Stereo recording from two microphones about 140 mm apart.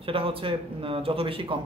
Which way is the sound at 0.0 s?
40° right (ahead or behind).